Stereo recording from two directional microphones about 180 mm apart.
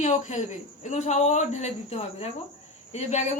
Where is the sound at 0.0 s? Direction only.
40° left (ahead or behind).